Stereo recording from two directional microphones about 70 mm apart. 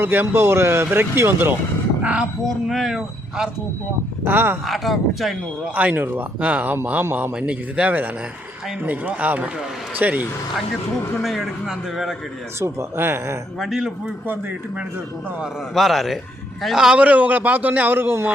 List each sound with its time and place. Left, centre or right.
0.0 s a man's voice: right
2.6 s speech: centre
4.2 s a man's voice: right
4.6 s speech: centre
5.7 s a man's voice: right
7.0 s a man's voice: right
7.3 s a man's voice: centre
11.2 s speech: centre
12.5 s a man's voice: right
13.6 s speech: centre
15.7 s a man's voice: centre; by 18.3 s right